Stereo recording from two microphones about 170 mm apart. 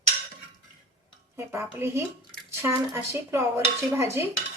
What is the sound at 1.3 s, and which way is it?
Speech, 15° right (ahead or behind).